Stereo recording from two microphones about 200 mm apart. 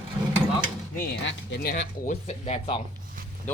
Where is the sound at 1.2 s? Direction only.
65° left (ahead or behind); by 2.1 s 50° left (ahead or behind).